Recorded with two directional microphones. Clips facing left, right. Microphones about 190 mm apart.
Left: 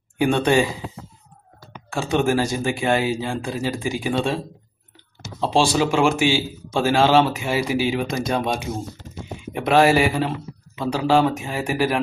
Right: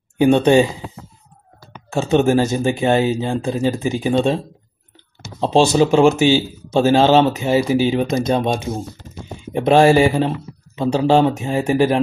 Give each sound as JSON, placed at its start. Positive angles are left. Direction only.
{"t": 0.2, "sound": "speech", "side_deg": -25}
{"t": 1.9, "sound": "speech", "side_deg": -25}
{"t": 5.5, "sound": "speech", "side_deg": -20}